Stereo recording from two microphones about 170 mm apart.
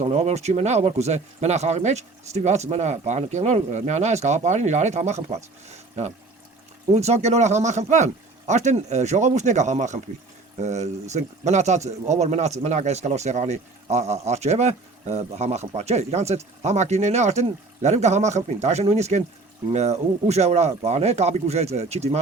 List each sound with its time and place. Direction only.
0.0 s speech: 40° right (ahead or behind)